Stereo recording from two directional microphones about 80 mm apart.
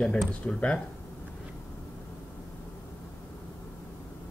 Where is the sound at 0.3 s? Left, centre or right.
Centre.